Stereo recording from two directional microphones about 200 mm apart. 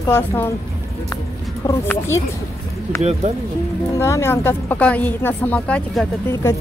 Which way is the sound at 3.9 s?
15° left (ahead or behind).